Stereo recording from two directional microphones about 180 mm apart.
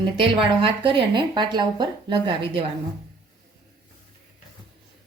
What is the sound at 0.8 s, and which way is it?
Speech, 30° right (ahead or behind).